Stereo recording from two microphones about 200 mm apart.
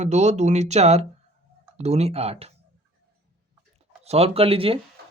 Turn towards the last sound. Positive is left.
turn(degrees=-25)  # may be behind; listen again after turning